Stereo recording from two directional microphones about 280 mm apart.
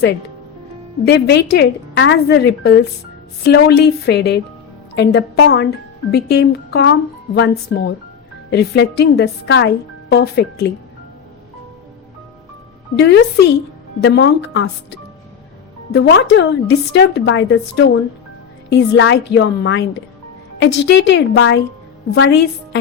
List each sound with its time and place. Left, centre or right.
1.0 s speech: left
13.0 s speech: left
15.9 s speech: left